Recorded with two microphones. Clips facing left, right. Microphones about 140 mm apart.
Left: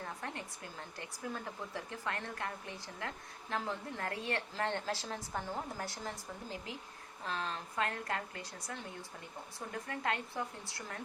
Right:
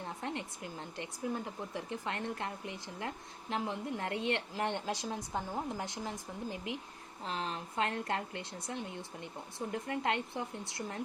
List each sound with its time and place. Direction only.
0.0 s speech: 20° right (ahead or behind)